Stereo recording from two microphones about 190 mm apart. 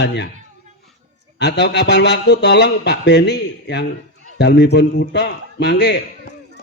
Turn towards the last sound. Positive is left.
turn(degrees=65)  # may be behind; listen again after turning